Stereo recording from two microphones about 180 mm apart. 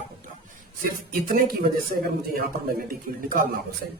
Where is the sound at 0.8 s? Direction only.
50° right (ahead or behind).